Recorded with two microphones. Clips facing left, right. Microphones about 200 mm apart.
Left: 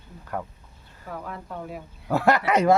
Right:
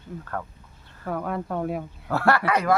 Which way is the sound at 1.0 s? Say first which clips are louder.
Right 8 dB; 60° right (ahead or behind).